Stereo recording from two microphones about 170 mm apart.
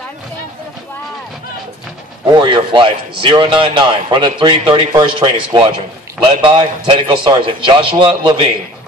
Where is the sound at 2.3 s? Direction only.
30° right (ahead or behind).